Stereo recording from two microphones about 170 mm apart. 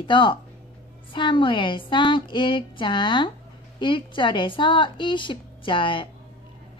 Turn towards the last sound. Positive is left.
turn(degrees=30)  # may be behind; listen again after turning